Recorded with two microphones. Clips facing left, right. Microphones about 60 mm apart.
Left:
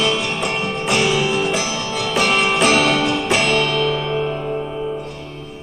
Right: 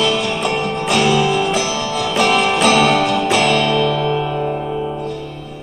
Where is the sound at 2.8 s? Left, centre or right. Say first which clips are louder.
Right 3 dB; right.